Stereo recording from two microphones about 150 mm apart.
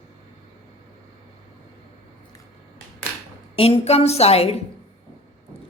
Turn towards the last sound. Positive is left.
turn(degrees=40)  # may be behind; listen again after turning